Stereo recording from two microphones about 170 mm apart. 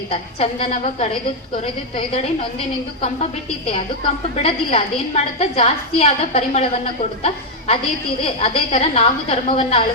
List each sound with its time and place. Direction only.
0.1 s a woman's voice: 35° left (ahead or behind)
4.4 s a woman's voice: 35° left (ahead or behind)